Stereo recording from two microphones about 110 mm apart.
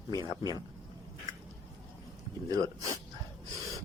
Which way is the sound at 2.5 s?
30° right (ahead or behind).